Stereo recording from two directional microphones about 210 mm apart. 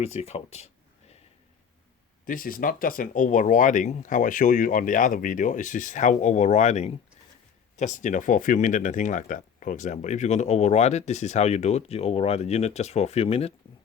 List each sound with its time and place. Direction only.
0.0 s speech: 30° left (ahead or behind)
2.2 s speech: 40° left (ahead or behind)